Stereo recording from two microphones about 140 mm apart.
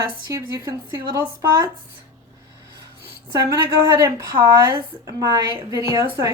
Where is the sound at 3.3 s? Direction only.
25° right (ahead or behind).